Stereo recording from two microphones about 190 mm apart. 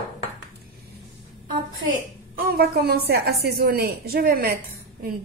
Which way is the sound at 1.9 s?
50° right (ahead or behind).